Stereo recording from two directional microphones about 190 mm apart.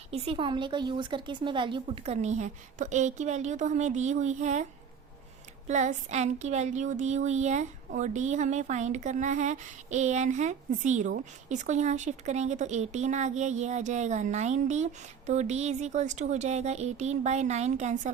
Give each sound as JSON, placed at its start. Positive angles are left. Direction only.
{"t": 0.1, "sound": "speech", "side_deg": -30}
{"t": 5.6, "sound": "speech", "side_deg": -40}